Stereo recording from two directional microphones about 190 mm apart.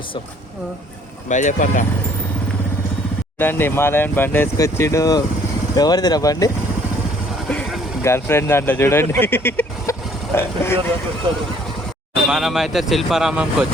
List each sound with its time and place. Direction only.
1.3 s speech: 40° left (ahead or behind)
3.3 s speech: 10° left (ahead or behind)
7.4 s vehicle: centre (ahead or behind)
8.0 s speech: 15° left (ahead or behind)
12.3 s speech: centre (ahead or behind)